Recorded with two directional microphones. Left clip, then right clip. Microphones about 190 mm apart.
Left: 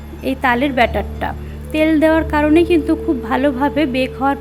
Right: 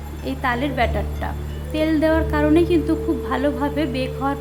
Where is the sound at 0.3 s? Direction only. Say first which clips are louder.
Left 7 dB; 25° left (ahead or behind).